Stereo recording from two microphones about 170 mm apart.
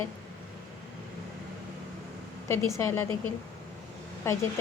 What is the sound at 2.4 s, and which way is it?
Speech, 15° left (ahead or behind).